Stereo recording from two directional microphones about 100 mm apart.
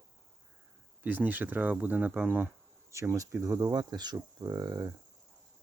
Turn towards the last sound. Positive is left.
turn(degrees=-40)  # may be behind; listen again after turning